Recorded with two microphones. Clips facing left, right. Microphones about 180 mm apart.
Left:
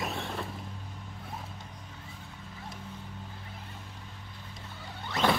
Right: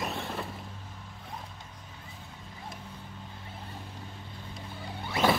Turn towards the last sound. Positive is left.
turn(degrees=-10)  # may be behind; listen again after turning